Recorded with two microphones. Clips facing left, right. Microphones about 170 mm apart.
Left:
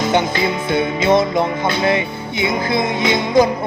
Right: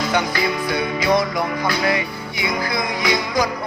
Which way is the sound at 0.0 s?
25° left (ahead or behind).